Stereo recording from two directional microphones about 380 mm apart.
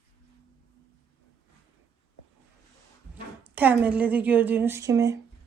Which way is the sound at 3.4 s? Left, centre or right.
Centre.